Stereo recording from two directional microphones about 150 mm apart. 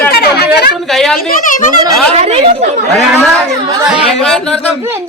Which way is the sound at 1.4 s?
65° left (ahead or behind).